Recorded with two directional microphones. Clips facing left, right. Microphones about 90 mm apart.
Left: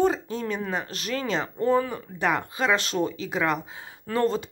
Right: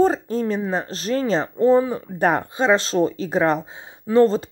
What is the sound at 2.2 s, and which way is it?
Speech, 35° right (ahead or behind).